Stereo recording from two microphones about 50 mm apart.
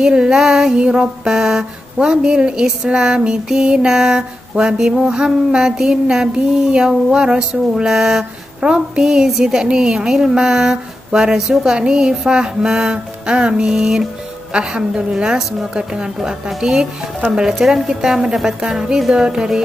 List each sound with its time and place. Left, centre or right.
0.0 s female singing: centre